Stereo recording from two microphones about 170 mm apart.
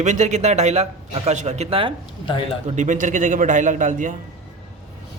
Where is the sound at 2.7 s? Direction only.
50° right (ahead or behind).